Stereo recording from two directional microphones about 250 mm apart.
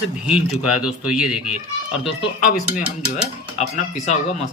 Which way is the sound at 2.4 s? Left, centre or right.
Left.